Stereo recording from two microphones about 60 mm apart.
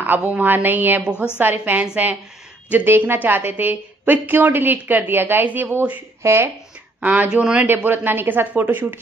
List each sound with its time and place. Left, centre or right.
0.0 s a woman's voice: right
1.1 s a woman's voice: left
1.4 s a woman's voice: right
6.2 s speech: right
7.0 s a woman's voice: right